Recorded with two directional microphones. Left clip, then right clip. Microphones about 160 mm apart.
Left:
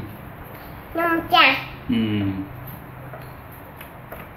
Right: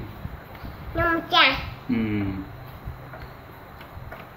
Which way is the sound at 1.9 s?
Centre (ahead or behind).